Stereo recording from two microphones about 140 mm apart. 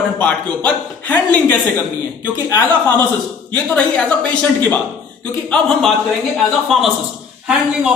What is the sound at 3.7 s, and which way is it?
A woman's voice, 5° left (ahead or behind).